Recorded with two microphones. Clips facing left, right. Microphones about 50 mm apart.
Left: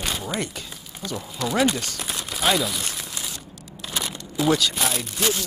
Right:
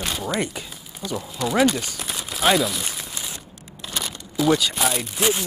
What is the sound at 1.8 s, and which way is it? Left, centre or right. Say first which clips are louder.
Crumpling: even; centre.